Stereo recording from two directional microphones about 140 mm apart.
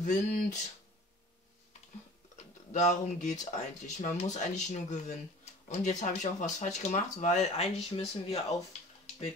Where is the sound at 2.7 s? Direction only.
55° left (ahead or behind).